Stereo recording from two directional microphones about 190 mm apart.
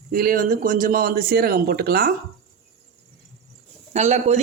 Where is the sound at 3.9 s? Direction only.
35° right (ahead or behind).